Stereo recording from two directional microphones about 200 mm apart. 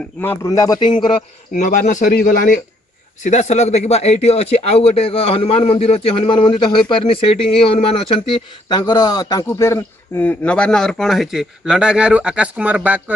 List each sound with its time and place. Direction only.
0.2 s speech: 10° left (ahead or behind)
1.6 s a man's voice: 40° left (ahead or behind); by 13.0 s 5° right (ahead or behind)